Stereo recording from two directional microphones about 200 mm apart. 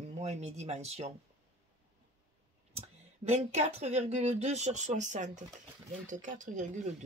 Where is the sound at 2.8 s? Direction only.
35° right (ahead or behind).